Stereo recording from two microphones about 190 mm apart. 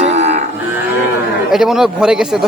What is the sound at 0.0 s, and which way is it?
Livestock, 35° right (ahead or behind).